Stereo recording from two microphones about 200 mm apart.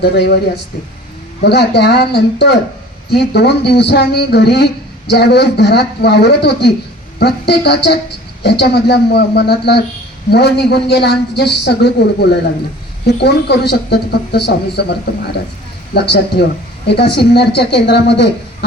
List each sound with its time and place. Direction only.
0.0 s speech: 55° left (ahead or behind)
16.0 s speech: 55° left (ahead or behind)